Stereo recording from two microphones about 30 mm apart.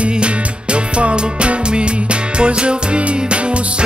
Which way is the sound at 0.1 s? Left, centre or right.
Right.